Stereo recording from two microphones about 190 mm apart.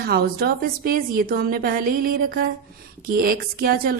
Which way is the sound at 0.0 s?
55° right (ahead or behind).